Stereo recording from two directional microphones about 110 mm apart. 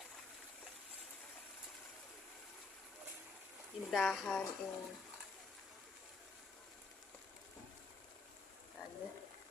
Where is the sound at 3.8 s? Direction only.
5° left (ahead or behind).